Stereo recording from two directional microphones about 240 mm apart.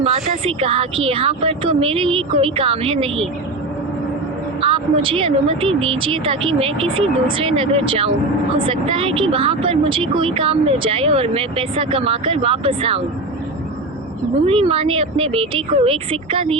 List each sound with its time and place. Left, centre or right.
0.0 s speech: right
4.6 s speech: right
14.4 s speech: right